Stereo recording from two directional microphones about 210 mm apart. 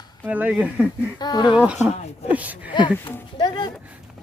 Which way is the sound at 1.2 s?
20° left (ahead or behind).